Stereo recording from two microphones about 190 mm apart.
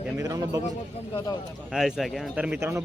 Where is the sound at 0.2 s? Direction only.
15° right (ahead or behind).